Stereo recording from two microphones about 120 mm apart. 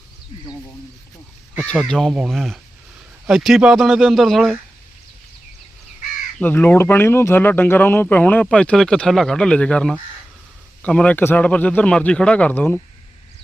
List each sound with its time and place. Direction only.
1.6 s speech: 5° left (ahead or behind)
6.4 s speech: 15° left (ahead or behind)